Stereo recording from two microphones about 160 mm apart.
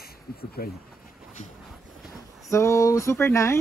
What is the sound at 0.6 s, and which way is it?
Speech, 70° left (ahead or behind).